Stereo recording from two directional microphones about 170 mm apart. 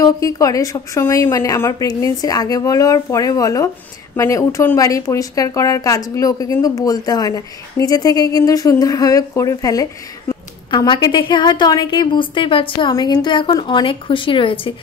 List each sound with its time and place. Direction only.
0.0 s speech: 20° left (ahead or behind)